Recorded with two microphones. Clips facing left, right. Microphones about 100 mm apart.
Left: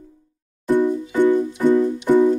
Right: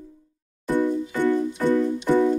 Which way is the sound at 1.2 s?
15° left (ahead or behind).